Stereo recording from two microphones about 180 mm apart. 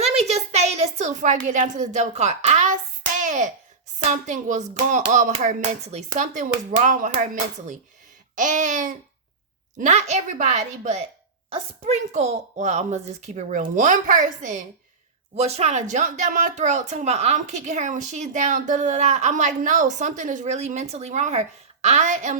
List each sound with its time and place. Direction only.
0.0 s a sound: 35° right (ahead or behind)
1.5 s a woman's voice: 45° right (ahead or behind)
8.4 s a woman's voice: 45° right (ahead or behind)